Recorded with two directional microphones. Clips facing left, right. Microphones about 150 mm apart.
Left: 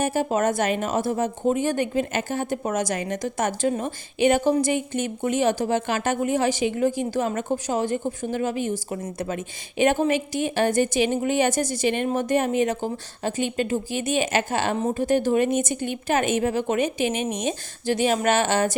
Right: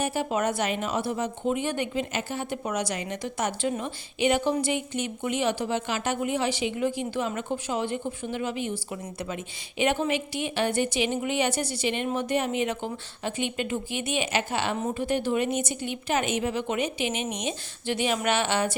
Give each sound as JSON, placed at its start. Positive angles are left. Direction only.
{"t": 0.0, "sound": "a woman's voice", "side_deg": 45}